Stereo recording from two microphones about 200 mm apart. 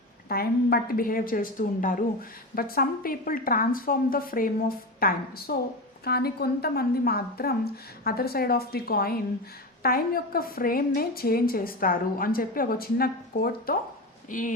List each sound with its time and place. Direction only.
0.3 s a woman's voice: 50° left (ahead or behind)